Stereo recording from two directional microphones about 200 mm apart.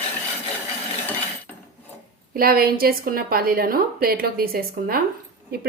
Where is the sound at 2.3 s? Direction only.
45° right (ahead or behind).